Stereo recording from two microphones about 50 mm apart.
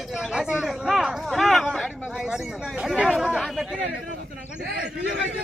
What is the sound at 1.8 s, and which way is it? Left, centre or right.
Speech, centre.